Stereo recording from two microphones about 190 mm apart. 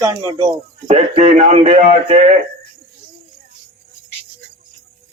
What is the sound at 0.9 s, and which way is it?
A man's voice, 35° right (ahead or behind).